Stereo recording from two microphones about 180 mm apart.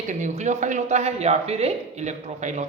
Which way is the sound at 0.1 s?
40° right (ahead or behind).